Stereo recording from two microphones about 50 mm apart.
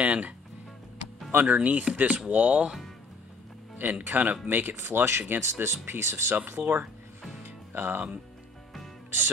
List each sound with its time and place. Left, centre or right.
0.0 s music: right
1.3 s speech: right
3.7 s speech: right
4.7 s speech: right
6.3 s speech: right
7.4 s music: right